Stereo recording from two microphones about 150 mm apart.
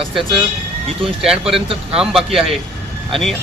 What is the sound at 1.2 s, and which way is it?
A man's voice, centre (ahead or behind).